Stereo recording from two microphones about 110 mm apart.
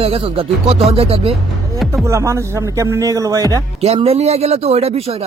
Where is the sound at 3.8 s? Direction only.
65° right (ahead or behind).